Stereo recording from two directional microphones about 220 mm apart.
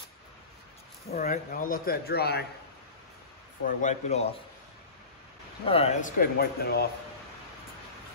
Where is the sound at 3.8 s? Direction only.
30° left (ahead or behind).